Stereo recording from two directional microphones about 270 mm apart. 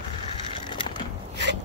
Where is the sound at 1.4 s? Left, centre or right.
Right.